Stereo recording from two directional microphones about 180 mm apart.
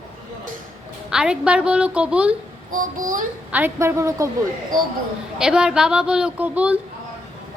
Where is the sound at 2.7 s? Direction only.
50° right (ahead or behind).